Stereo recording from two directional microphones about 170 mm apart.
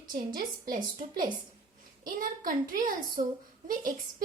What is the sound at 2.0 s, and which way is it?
A woman's voice, 55° right (ahead or behind).